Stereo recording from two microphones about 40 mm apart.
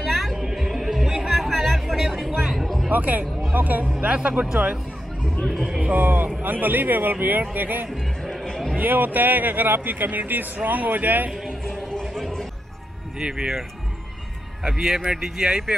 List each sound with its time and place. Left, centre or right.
0.0 s a sound: centre
0.4 s a sound: centre
1.2 s music: centre
2.9 s speech: right
4.0 s speech: right
5.5 s speech: centre
5.8 s speech: right
7.9 s speech: centre
8.5 s a sound: centre
8.7 s speech: right
11.6 s a sound: centre
13.2 s speech: centre